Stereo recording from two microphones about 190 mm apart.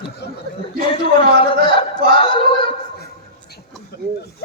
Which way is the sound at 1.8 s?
30° left (ahead or behind).